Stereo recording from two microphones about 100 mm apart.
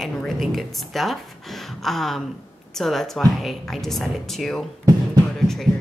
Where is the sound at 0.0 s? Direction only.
Centre (ahead or behind).